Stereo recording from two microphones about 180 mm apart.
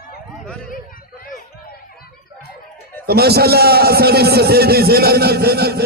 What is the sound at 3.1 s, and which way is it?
A man's voice, 60° right (ahead or behind).